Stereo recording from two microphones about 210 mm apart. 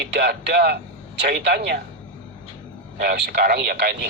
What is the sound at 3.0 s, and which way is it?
A man's voice, 45° right (ahead or behind).